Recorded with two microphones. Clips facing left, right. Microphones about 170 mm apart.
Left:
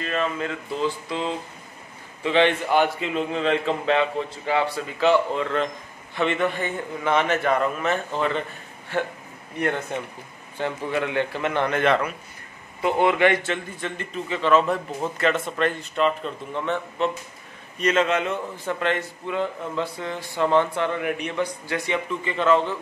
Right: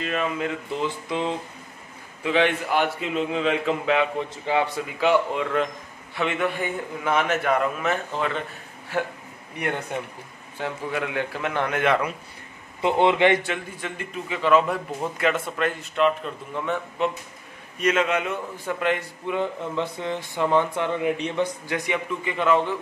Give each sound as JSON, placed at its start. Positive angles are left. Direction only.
{"t": 0.0, "sound": "a man's voice", "side_deg": -15}
{"t": 2.2, "sound": "a man's voice", "side_deg": -5}
{"t": 10.6, "sound": "a man's voice", "side_deg": -5}
{"t": 12.8, "sound": "a man's voice", "side_deg": -20}